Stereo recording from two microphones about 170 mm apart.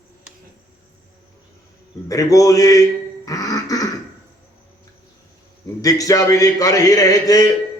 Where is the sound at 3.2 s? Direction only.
20° left (ahead or behind).